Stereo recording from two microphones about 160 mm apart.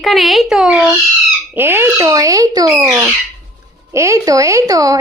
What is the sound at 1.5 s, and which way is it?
Speech, 15° right (ahead or behind).